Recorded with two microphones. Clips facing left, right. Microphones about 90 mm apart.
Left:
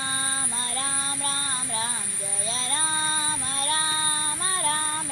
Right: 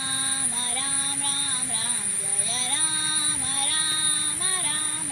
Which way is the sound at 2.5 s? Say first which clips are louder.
Left 4 dB; 40° left (ahead or behind).